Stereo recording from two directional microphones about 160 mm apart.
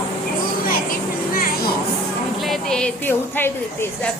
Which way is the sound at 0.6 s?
65° left (ahead or behind).